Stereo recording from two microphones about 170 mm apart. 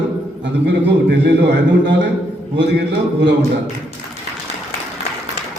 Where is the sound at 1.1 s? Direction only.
90° right.